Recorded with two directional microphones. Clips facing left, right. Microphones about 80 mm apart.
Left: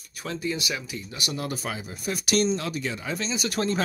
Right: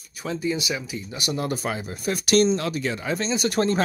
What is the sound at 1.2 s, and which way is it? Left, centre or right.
Speech, right.